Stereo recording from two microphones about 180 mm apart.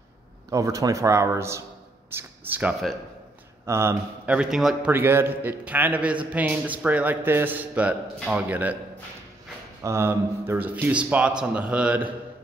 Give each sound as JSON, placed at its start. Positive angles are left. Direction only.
{"t": 0.5, "sound": "speech", "side_deg": -20}
{"t": 9.8, "sound": "speech", "side_deg": -15}